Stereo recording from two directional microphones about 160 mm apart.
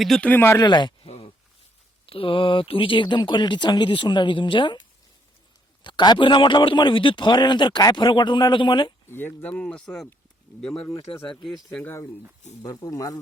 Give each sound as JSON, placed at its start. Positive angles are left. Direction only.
{"t": 0.0, "sound": "speech", "side_deg": 5}
{"t": 0.6, "sound": "a sound", "side_deg": 30}
{"t": 2.0, "sound": "speech", "side_deg": 35}
{"t": 5.8, "sound": "a man's voice", "side_deg": 30}
{"t": 9.0, "sound": "speech", "side_deg": 15}
{"t": 11.7, "sound": "speech", "side_deg": 10}
{"t": 12.6, "sound": "a man's voice", "side_deg": 25}